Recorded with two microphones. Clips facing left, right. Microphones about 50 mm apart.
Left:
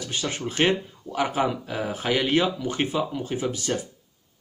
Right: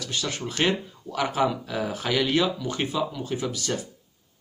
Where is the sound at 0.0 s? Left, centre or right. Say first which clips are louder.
Left 1 dB; left.